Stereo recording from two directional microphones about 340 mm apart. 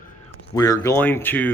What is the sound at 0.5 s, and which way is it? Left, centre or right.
Speech, centre.